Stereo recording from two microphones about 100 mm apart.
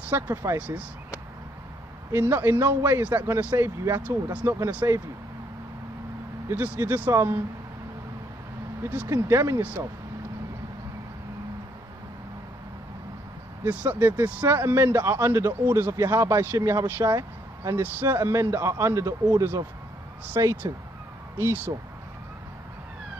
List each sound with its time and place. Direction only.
0.1 s a man's voice: 25° right (ahead or behind)
0.6 s speech: 15° right (ahead or behind)
2.1 s a man's voice: 20° right (ahead or behind)
6.5 s a man's voice: 20° right (ahead or behind)
9.0 s speech: 30° right (ahead or behind)
9.6 s speech: 15° right (ahead or behind)
13.7 s a man's voice: 15° right (ahead or behind)